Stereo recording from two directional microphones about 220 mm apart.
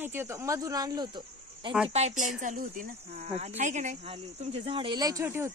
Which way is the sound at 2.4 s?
35° right (ahead or behind).